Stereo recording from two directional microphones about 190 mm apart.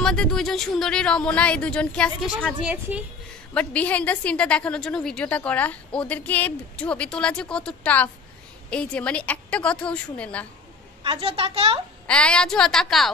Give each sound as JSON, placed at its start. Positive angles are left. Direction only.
{"t": 0.0, "sound": "speech", "side_deg": 5}
{"t": 3.5, "sound": "a woman's voice", "side_deg": 5}
{"t": 11.1, "sound": "a woman's voice", "side_deg": -30}
{"t": 12.1, "sound": "speech", "side_deg": 5}